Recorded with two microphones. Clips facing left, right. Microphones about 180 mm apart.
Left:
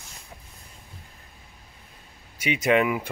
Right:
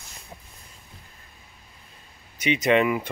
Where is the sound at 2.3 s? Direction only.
10° left (ahead or behind).